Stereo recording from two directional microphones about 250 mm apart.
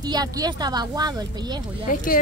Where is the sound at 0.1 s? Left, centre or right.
Centre.